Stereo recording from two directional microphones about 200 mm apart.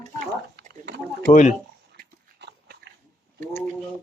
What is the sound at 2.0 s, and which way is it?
Dog, 55° right (ahead or behind).